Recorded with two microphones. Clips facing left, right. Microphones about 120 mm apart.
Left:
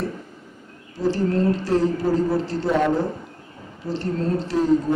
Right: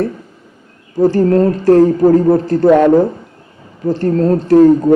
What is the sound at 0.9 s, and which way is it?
A woman's voice, 50° right (ahead or behind).